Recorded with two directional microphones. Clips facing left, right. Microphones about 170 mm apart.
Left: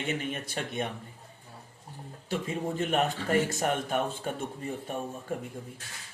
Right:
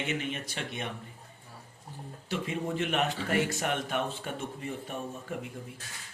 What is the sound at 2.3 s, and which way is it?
A man's voice, 45° left (ahead or behind).